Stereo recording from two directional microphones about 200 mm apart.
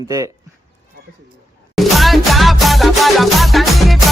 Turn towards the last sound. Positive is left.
turn(degrees=0)  # may be behind; listen again after turning